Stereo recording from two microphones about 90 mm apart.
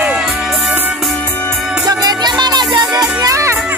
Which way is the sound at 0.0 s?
10° right (ahead or behind).